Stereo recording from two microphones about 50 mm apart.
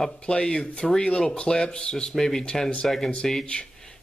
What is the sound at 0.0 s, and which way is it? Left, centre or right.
Speech, centre.